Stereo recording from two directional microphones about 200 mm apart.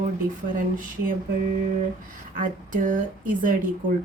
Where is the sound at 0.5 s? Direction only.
40° right (ahead or behind).